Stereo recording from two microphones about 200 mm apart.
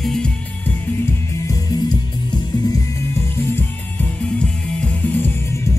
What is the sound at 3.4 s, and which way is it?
Music, 10° left (ahead or behind).